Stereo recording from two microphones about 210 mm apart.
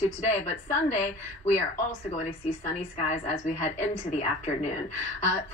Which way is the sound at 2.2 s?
35° left (ahead or behind).